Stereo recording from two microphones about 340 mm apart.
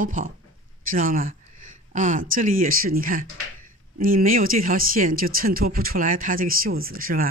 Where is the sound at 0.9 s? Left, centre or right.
Right.